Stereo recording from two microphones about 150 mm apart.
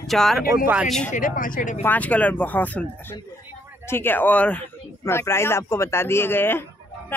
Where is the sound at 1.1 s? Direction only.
65° left (ahead or behind).